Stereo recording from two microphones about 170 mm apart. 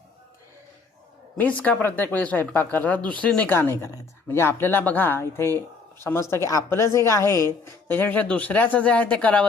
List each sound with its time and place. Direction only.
1.4 s speech: 10° left (ahead or behind)